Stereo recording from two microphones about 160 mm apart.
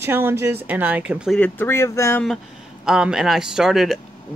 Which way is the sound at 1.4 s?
15° left (ahead or behind).